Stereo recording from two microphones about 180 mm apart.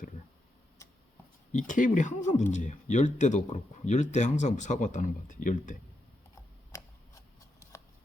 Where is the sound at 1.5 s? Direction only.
45° left (ahead or behind).